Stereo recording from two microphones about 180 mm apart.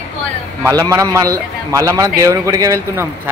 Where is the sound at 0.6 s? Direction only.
20° right (ahead or behind).